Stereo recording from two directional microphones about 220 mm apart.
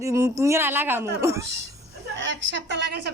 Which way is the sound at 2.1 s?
55° right (ahead or behind).